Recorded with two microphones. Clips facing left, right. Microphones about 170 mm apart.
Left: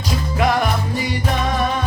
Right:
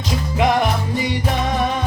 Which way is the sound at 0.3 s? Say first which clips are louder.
Right 1 dB; 20° right (ahead or behind).